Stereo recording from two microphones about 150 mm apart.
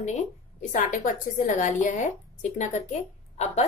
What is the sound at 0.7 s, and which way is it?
A woman's voice, 55° left (ahead or behind).